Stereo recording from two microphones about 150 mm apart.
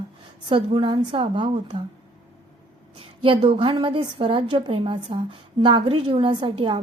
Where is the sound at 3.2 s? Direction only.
35° right (ahead or behind).